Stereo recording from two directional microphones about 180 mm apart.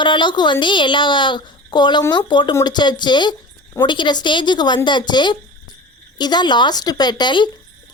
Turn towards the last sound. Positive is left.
turn(degrees=25)  # may be behind; listen again after turning